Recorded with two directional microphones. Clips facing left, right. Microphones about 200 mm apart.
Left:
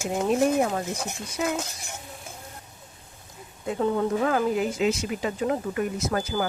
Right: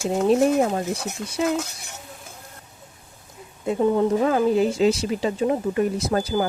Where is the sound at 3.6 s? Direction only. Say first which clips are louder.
Right 5 dB; 20° right (ahead or behind).